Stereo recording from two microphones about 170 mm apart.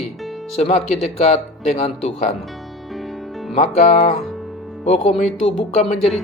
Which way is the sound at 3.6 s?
45° left (ahead or behind).